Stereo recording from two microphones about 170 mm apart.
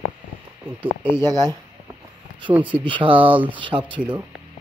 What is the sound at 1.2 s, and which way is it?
Speech, 25° right (ahead or behind).